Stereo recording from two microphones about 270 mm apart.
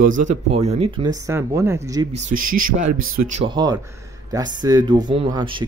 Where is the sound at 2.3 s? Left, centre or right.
Right.